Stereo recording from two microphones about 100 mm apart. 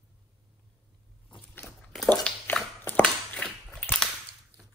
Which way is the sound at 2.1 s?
15° left (ahead or behind).